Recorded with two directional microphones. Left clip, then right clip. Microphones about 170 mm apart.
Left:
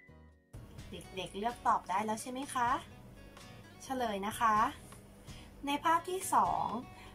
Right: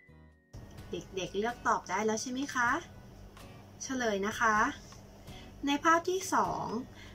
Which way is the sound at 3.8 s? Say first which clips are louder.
Right 3 dB; 10° left (ahead or behind).